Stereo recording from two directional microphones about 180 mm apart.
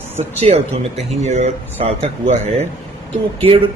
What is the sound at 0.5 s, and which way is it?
Speech, 35° right (ahead or behind).